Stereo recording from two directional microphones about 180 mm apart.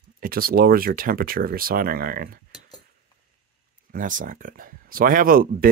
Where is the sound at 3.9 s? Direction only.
45° right (ahead or behind).